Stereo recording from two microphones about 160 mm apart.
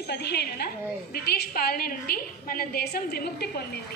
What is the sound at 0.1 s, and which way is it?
A woman's voice, 90° left.